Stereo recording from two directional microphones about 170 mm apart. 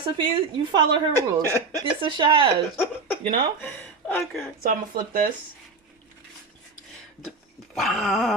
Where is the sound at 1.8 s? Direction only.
30° right (ahead or behind).